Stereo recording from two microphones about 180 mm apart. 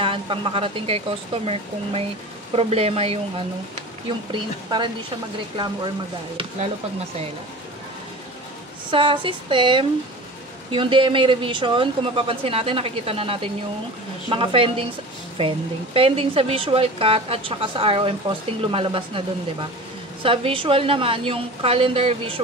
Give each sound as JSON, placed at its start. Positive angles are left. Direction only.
{"t": 0.0, "sound": "a woman's voice", "side_deg": -30}
{"t": 8.9, "sound": "a woman's voice", "side_deg": -30}
{"t": 20.2, "sound": "a woman's voice", "side_deg": -30}